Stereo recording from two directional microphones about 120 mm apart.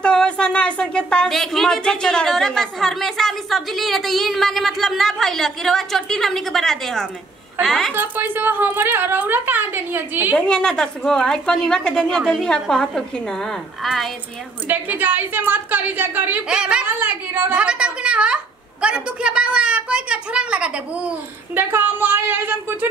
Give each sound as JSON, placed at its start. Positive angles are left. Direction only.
{"t": 0.0, "sound": "speech", "side_deg": 5}
{"t": 7.9, "sound": "a woman's voice", "side_deg": -15}
{"t": 10.3, "sound": "speech", "side_deg": 5}
{"t": 14.7, "sound": "a woman's voice", "side_deg": -15}